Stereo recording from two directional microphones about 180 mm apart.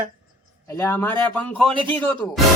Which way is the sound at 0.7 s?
15° left (ahead or behind).